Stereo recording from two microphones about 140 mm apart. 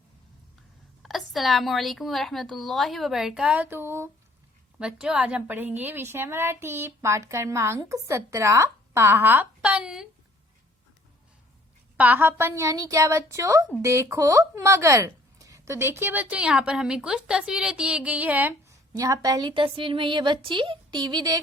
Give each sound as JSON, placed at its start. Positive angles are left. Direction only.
{"t": 1.0, "sound": "a woman's voice", "side_deg": 0}
{"t": 4.8, "sound": "a woman's voice", "side_deg": -5}
{"t": 11.9, "sound": "a woman's voice", "side_deg": -10}
{"t": 18.9, "sound": "a woman's voice", "side_deg": -25}